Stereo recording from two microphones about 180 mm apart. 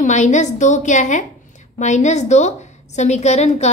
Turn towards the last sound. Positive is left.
turn(degrees=40)  # may be behind; listen again after turning